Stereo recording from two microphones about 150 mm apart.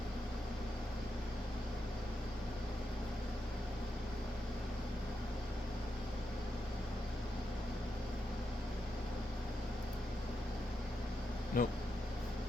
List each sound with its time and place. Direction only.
11.6 s speech: 70° left (ahead or behind)